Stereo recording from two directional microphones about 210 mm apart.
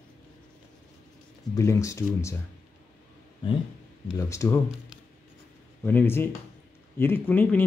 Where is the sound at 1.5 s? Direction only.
15° left (ahead or behind).